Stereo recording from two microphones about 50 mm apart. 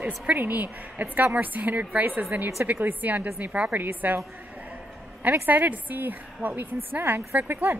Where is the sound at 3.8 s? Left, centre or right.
Right.